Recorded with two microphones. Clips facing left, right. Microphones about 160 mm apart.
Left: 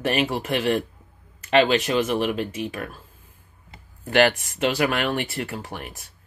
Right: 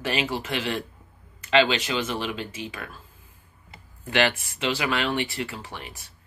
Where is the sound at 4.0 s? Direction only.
45° left (ahead or behind).